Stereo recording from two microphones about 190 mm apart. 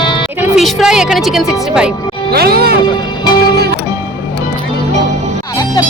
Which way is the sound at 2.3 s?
55° right (ahead or behind).